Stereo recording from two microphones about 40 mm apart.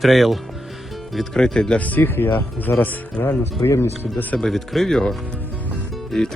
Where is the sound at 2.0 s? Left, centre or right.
Left.